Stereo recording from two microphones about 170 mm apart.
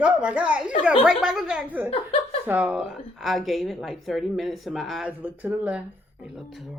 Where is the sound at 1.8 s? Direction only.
35° left (ahead or behind).